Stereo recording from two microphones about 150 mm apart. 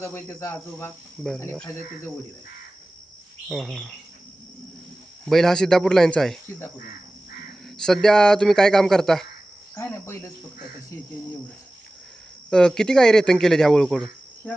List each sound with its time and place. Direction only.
0.0 s speech: 15° left (ahead or behind)
3.5 s speech: centre (ahead or behind)
5.2 s speech: 5° left (ahead or behind)
7.8 s speech: 5° left (ahead or behind)
9.7 s speech: 20° left (ahead or behind)
12.5 s speech: 5° left (ahead or behind)